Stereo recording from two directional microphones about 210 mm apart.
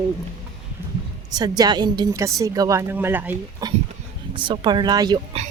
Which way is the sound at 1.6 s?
20° right (ahead or behind).